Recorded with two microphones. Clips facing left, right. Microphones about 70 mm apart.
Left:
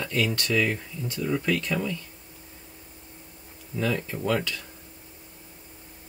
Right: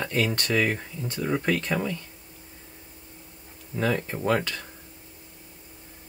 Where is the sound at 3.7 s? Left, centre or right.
Right.